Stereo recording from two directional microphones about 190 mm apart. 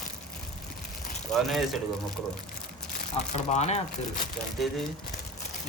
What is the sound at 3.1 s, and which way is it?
Speech, 35° left (ahead or behind).